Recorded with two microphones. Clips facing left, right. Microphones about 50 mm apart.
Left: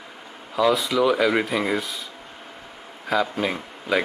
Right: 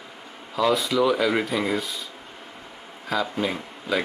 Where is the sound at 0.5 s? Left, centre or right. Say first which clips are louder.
Left 1 dB; centre.